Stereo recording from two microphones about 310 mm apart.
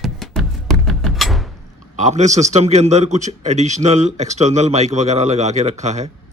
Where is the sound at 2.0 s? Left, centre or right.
Right.